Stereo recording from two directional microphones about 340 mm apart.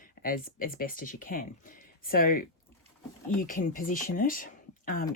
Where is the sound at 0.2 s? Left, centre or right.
Left.